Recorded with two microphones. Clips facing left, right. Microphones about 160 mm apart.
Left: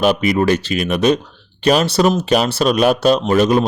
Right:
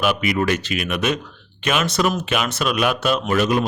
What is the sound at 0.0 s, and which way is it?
Speech, 35° left (ahead or behind).